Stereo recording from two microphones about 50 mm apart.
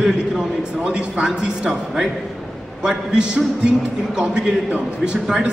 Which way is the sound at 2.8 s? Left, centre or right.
Centre.